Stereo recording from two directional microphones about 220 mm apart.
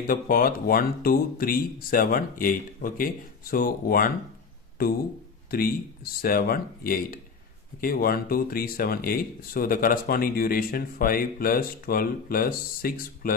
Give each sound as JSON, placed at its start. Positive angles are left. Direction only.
{"t": 0.0, "sound": "speech", "side_deg": 40}
{"t": 6.2, "sound": "speech", "side_deg": 40}